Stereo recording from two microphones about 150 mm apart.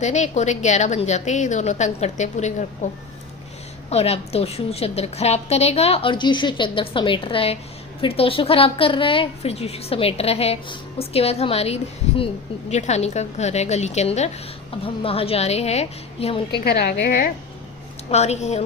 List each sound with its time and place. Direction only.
0.0 s a woman's voice: 50° left (ahead or behind)
3.8 s a woman's voice: 45° left (ahead or behind)
16.6 s a woman's voice: 90° left; by 17.3 s 75° left (ahead or behind)
18.1 s a woman's voice: 45° left (ahead or behind)